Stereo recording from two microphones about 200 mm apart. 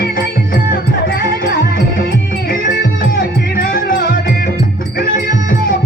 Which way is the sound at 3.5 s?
45° left (ahead or behind).